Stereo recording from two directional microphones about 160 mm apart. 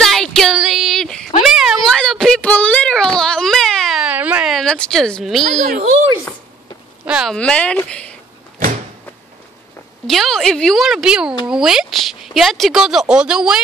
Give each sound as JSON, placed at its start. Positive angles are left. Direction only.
{"t": 0.0, "sound": "a sound", "side_deg": 5}
{"t": 1.4, "sound": "child singing", "side_deg": 0}
{"t": 5.5, "sound": "a child's voice", "side_deg": -60}
{"t": 7.1, "sound": "speech", "side_deg": -5}
{"t": 7.3, "sound": "speech", "side_deg": 5}
{"t": 10.0, "sound": "speech", "side_deg": 0}